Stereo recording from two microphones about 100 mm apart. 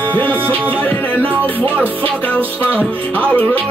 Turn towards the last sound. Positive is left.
turn(degrees=15)  # may be behind; listen again after turning